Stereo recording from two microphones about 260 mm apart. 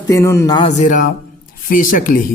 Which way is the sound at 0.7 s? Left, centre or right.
Left.